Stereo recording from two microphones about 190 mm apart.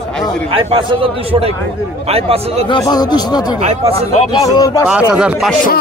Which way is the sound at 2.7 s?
20° left (ahead or behind).